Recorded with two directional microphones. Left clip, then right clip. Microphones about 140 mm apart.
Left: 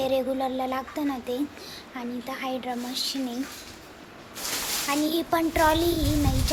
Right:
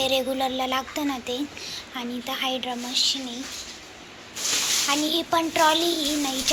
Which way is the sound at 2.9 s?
35° left (ahead or behind).